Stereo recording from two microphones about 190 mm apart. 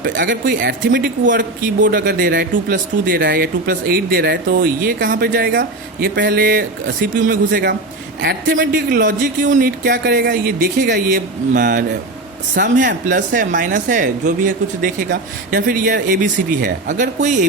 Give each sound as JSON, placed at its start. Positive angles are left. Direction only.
{"t": 0.2, "sound": "speech", "side_deg": -45}
{"t": 3.2, "sound": "speech", "side_deg": -65}
{"t": 8.2, "sound": "speech", "side_deg": -55}